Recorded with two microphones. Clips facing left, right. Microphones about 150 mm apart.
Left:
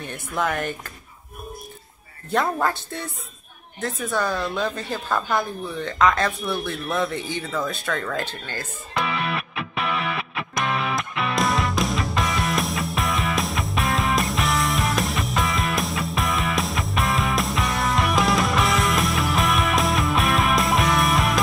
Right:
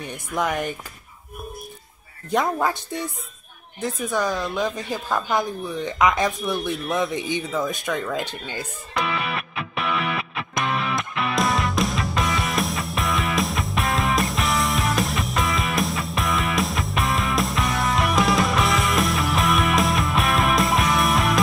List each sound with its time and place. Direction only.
0.0 s a woman's voice: 15° right (ahead or behind)
2.3 s a woman's voice: 15° right (ahead or behind)
8.9 s music: centre (ahead or behind)